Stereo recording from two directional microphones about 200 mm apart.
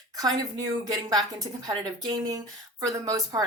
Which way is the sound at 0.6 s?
20° right (ahead or behind).